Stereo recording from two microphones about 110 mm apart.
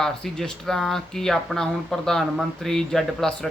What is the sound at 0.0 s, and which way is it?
Speech, 5° left (ahead or behind).